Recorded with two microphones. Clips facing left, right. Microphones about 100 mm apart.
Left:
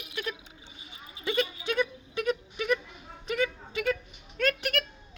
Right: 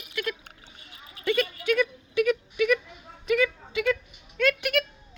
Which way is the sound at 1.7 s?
30° left (ahead or behind).